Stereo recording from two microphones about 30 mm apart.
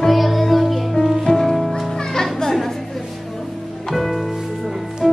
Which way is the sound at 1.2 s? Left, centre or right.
Centre.